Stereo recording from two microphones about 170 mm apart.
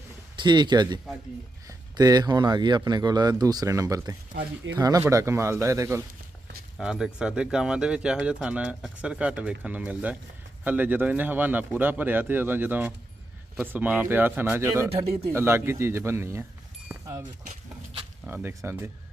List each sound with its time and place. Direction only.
0.3 s a man's voice: 25° right (ahead or behind)
6.7 s speech: 5° right (ahead or behind)
18.4 s speech: 15° right (ahead or behind)